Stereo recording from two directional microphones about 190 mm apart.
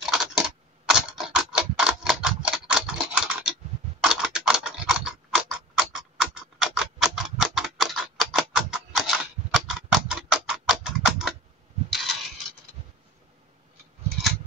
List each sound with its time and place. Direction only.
0.0 s computer keyboard: centre (ahead or behind)
0.4 s typing: centre (ahead or behind)
11.9 s mechanisms: centre (ahead or behind)